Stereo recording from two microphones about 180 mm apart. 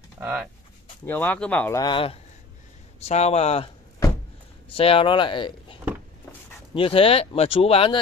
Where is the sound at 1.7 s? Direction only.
25° left (ahead or behind).